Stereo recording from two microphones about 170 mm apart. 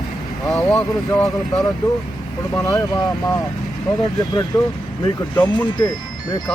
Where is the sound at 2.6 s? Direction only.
20° left (ahead or behind).